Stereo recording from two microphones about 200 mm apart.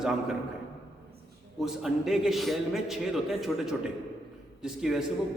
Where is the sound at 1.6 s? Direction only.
Centre (ahead or behind).